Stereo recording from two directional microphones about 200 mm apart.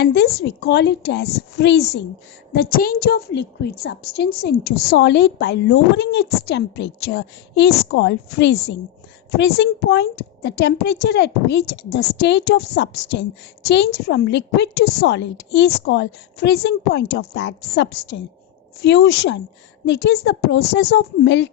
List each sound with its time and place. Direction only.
0.0 s a woman's voice: 55° left (ahead or behind)